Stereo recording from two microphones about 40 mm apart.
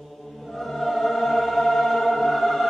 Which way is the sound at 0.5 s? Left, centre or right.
Centre.